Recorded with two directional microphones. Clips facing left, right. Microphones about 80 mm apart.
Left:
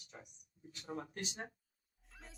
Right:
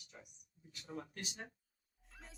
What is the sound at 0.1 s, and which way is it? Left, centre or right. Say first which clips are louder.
Speech: left 3 dB; left.